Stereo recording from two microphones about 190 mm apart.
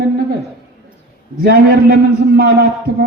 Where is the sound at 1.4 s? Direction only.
55° right (ahead or behind).